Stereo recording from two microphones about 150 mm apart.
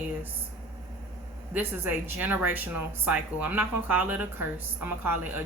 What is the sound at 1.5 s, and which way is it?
Speech, 15° right (ahead or behind).